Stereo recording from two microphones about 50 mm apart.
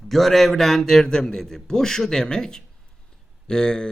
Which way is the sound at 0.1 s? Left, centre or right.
Centre.